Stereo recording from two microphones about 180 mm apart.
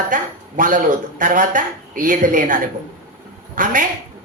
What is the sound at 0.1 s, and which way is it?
Speech, 45° right (ahead or behind).